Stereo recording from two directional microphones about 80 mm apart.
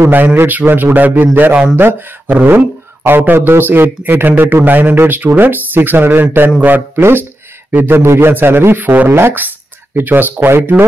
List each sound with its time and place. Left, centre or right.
0.0 s speech: right